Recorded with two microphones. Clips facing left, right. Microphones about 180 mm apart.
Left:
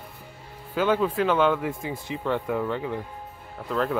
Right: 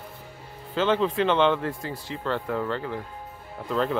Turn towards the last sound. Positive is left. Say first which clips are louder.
# even
turn(degrees=0)  # may be behind; listen again after turning